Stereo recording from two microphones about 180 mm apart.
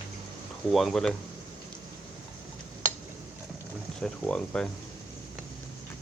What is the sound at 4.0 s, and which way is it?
Speech, 5° left (ahead or behind).